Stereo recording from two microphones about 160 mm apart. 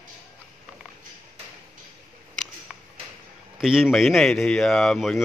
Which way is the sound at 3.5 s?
5° right (ahead or behind).